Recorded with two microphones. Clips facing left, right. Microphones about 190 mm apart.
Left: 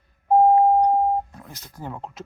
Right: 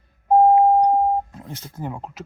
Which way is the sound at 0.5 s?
15° right (ahead or behind).